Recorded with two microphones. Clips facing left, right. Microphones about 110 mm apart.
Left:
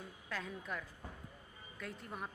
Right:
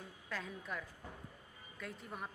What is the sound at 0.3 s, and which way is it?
Speech, centre (ahead or behind).